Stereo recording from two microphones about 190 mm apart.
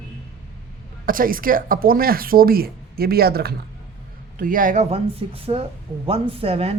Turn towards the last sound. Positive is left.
turn(degrees=-30)  # may be behind; listen again after turning